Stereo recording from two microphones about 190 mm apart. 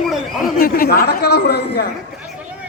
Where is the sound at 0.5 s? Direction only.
50° left (ahead or behind).